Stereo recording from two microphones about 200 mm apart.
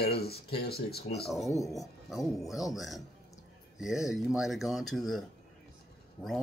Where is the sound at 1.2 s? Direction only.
Centre (ahead or behind).